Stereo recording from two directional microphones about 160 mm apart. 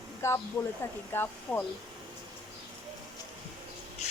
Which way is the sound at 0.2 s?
15° left (ahead or behind).